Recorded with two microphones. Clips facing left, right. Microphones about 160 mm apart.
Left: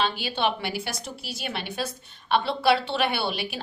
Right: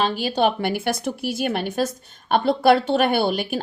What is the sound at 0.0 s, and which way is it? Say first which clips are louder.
A woman's voice: right 6 dB; 45° right (ahead or behind).